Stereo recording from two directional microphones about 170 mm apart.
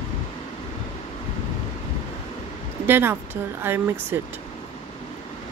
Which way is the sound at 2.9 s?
15° right (ahead or behind).